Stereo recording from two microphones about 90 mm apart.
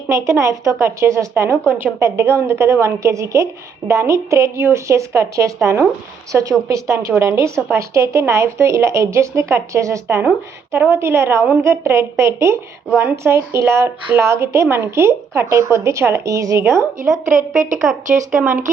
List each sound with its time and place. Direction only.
0.1 s a woman's voice: 35° right (ahead or behind)
17.1 s a woman's voice: 5° right (ahead or behind)